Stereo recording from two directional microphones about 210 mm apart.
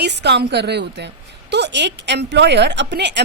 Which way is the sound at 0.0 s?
55° right (ahead or behind).